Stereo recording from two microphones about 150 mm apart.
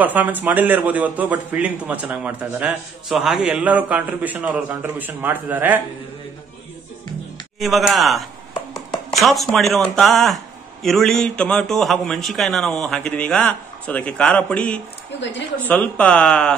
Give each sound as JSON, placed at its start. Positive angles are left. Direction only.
{"t": 0.0, "sound": "a man's voice", "side_deg": -10}
{"t": 7.5, "sound": "speech", "side_deg": 0}